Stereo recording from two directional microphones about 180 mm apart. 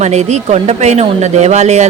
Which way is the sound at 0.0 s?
40° right (ahead or behind).